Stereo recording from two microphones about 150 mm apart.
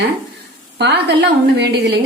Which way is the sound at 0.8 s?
90° right.